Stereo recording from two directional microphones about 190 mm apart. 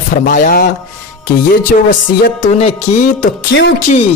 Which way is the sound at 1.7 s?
40° left (ahead or behind).